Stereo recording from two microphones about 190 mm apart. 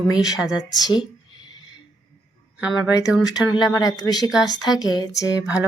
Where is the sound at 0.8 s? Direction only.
20° left (ahead or behind).